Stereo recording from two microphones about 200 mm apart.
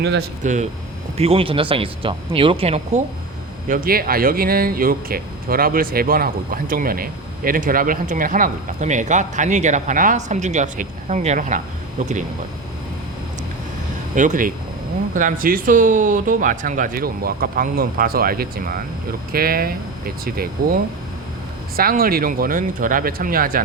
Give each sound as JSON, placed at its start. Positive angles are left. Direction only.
{"t": 0.4, "sound": "speech", "side_deg": -35}
{"t": 3.7, "sound": "speech", "side_deg": -45}
{"t": 14.2, "sound": "speech", "side_deg": -40}
{"t": 21.8, "sound": "speech", "side_deg": -45}